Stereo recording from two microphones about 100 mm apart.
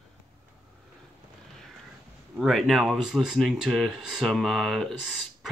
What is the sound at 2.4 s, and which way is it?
Speech, centre (ahead or behind).